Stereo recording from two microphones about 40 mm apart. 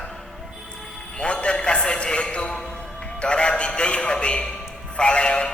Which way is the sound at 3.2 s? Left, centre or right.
Left.